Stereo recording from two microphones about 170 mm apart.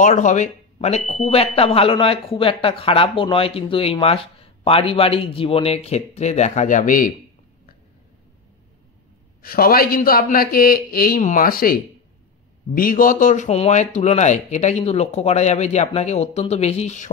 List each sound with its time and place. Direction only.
0.0 s speech: 45° left (ahead or behind)
9.4 s speech: 60° left (ahead or behind); by 17.1 s 45° left (ahead or behind)